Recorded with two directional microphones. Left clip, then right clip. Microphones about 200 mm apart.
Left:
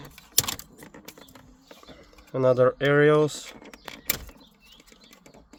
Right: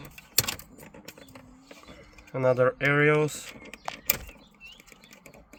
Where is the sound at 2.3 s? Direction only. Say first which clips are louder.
Left 3 dB; 55° left (ahead or behind).